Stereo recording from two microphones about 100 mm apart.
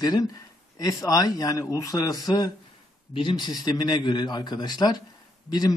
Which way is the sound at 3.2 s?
50° left (ahead or behind).